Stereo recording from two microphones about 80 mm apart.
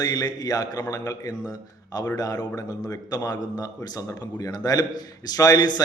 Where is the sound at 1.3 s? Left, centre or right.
Left.